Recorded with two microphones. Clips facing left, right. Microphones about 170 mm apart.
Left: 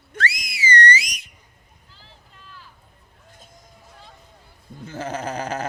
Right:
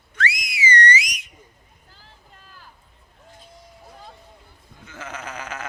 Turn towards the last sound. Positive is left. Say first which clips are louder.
# left 7 dB
turn(degrees=35)  # may be behind; listen again after turning